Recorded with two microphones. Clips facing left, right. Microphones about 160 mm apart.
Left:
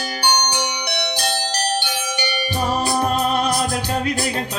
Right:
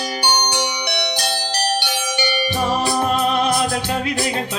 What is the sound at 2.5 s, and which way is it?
Music, 40° left (ahead or behind).